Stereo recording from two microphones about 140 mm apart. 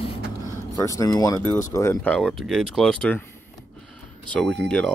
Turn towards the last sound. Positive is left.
turn(degrees=5)  # may be behind; listen again after turning